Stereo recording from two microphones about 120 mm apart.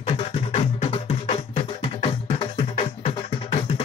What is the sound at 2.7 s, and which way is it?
Music, 60° left (ahead or behind).